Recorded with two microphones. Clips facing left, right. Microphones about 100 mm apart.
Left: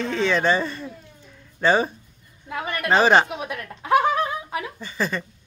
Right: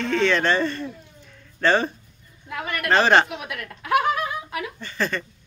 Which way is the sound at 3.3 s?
25° left (ahead or behind).